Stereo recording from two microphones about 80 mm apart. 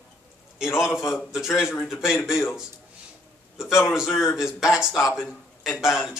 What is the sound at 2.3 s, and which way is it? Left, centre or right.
Speech, left.